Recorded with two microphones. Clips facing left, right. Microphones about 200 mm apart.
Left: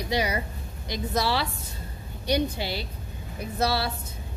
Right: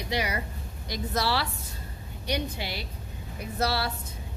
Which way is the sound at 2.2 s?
30° left (ahead or behind).